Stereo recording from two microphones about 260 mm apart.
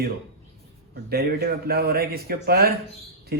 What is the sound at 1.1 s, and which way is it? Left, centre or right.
Speech, right.